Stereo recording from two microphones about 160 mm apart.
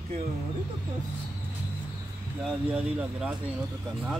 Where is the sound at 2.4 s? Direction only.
5° right (ahead or behind).